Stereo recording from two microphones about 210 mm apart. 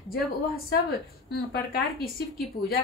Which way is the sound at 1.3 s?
45° left (ahead or behind).